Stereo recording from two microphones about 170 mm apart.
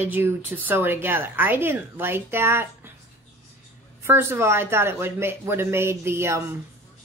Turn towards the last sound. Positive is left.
turn(degrees=-15)  # may be behind; listen again after turning